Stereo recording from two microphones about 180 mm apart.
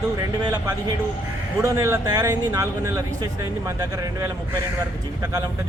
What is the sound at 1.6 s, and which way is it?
Speech, 15° right (ahead or behind).